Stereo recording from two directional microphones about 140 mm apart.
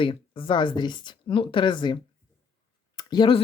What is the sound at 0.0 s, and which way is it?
Speech, 40° left (ahead or behind).